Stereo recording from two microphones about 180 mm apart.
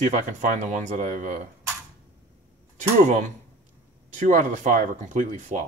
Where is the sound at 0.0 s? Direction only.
45° right (ahead or behind).